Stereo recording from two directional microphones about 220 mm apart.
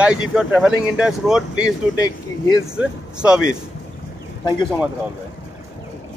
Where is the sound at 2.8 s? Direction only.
5° right (ahead or behind).